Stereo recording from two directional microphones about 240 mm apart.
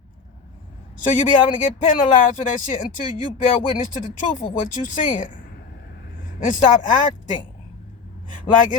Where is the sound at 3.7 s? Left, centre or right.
Left.